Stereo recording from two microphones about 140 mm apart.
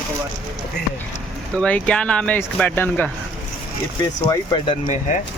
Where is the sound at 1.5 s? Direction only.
5° left (ahead or behind).